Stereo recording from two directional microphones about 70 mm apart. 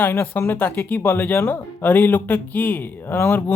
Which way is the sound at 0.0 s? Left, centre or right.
Left.